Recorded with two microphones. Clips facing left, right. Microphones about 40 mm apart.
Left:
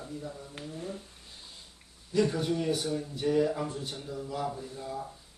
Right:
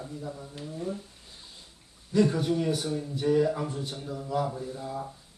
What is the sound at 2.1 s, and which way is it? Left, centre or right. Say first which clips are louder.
Speech: right 3 dB; centre.